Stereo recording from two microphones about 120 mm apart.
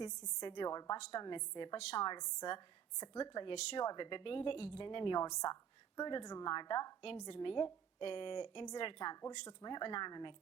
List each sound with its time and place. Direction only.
0.0 s a woman's voice: 40° left (ahead or behind)
5.2 s a woman's voice: 30° left (ahead or behind)
7.0 s a woman's voice: 50° left (ahead or behind)
9.5 s a woman's voice: 35° left (ahead or behind)